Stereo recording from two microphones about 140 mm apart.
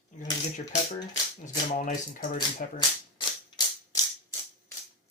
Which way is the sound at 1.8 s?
70° left (ahead or behind).